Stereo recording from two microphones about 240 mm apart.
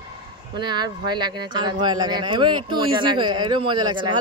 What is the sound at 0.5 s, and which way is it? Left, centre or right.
Speech, centre.